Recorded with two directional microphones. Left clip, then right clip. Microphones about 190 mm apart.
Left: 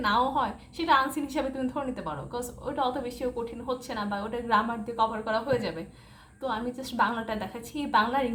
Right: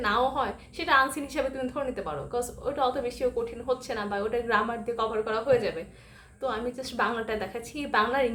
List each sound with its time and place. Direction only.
0.0 s a woman's voice: 15° right (ahead or behind)